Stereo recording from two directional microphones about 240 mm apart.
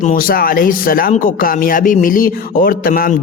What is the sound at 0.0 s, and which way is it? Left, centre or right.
Speech, left.